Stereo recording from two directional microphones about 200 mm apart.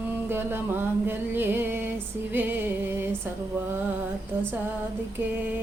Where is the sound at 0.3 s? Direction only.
10° right (ahead or behind).